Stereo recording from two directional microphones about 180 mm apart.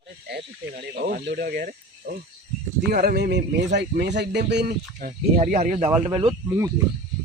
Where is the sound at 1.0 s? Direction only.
60° right (ahead or behind).